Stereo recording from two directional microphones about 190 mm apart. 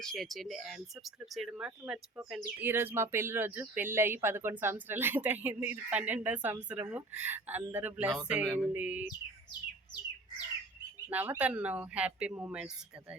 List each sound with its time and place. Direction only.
0.0 s speech: centre (ahead or behind)
9.5 s bird: 25° left (ahead or behind)
11.1 s speech: 10° right (ahead or behind)